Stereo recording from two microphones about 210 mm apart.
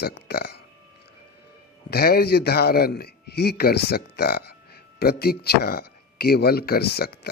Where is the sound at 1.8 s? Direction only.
50° left (ahead or behind).